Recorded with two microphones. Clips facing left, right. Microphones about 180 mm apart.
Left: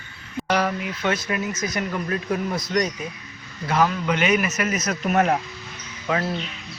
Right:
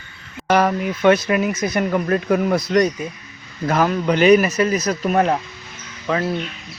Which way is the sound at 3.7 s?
50° right (ahead or behind).